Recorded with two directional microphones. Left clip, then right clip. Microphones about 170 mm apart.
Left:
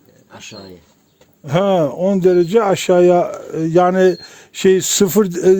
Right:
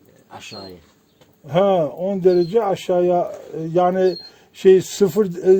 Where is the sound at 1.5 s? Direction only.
55° left (ahead or behind).